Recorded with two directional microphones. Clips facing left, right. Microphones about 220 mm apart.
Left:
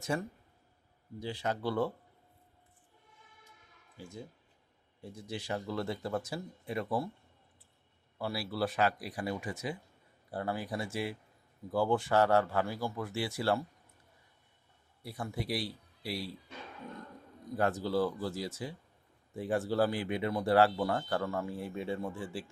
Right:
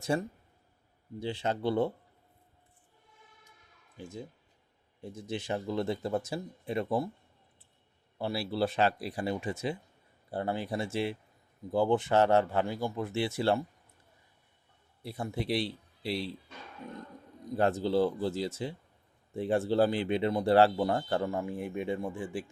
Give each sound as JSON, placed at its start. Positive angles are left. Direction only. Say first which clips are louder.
{"t": 0.0, "sound": "a man's voice", "louder": "right 4 dB", "side_deg": -30}
{"t": 3.9, "sound": "a man's voice", "louder": "right 4 dB", "side_deg": -20}
{"t": 8.2, "sound": "a man's voice", "louder": "right 3 dB", "side_deg": -25}
{"t": 15.0, "sound": "a man's voice", "louder": "right 4 dB", "side_deg": -25}
{"t": 17.6, "sound": "a man's voice", "louder": "right 4 dB", "side_deg": -25}